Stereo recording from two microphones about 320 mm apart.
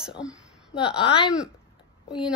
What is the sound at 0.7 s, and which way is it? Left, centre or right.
Speech, centre.